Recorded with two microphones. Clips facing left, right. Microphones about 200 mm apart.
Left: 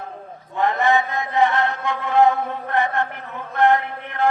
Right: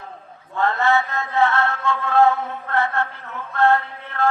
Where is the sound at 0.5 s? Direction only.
15° left (ahead or behind).